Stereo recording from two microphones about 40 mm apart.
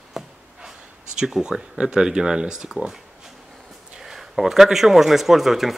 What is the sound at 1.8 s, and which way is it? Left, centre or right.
Speech, centre.